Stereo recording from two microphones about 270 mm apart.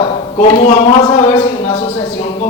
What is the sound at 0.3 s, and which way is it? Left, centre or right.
Speech, left.